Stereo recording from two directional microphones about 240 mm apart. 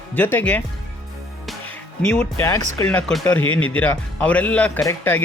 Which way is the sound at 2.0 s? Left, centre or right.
Centre.